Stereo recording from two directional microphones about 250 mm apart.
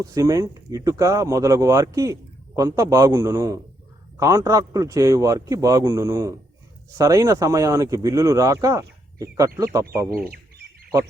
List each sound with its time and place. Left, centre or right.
0.0 s a man's voice: centre
10.2 s speech: right